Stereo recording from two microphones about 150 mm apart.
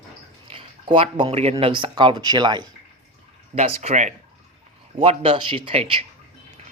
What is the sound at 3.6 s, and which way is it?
Speech, 45° right (ahead or behind).